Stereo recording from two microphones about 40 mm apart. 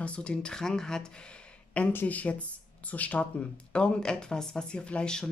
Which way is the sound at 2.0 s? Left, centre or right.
Left.